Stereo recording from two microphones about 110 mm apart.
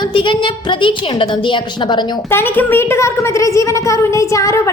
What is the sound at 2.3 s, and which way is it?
A woman's voice, 20° left (ahead or behind).